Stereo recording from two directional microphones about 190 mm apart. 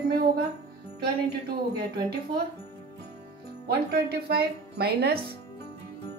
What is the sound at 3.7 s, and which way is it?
Speech, 55° right (ahead or behind).